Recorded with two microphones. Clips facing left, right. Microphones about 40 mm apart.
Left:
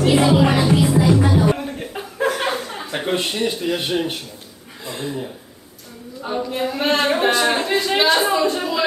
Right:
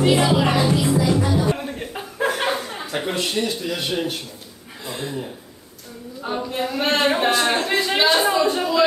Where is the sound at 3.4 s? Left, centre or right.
Left.